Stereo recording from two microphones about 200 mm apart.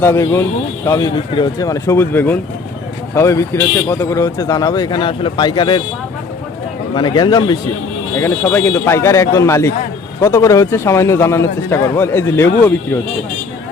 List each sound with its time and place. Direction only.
0.0 s a man's voice: 15° left (ahead or behind)
6.9 s a man's voice: 20° left (ahead or behind)